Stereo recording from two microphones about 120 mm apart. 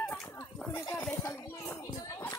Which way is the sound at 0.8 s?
25° left (ahead or behind).